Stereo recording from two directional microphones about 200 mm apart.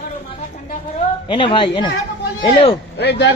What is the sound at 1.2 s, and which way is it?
A man's voice, 25° left (ahead or behind).